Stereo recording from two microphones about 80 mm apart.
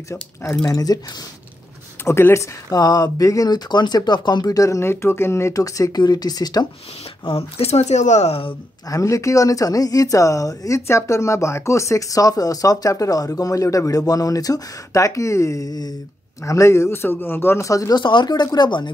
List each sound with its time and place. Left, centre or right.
0.1 s a man's voice: left
0.7 s speech: left
2.0 s a man's voice: left
2.7 s speech: left
8.8 s speech: left
16.4 s a man's voice: left
17.6 s speech: left
17.9 s speech: left